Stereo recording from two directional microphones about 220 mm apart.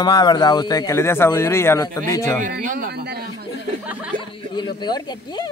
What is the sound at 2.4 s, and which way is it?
Speech, 40° right (ahead or behind).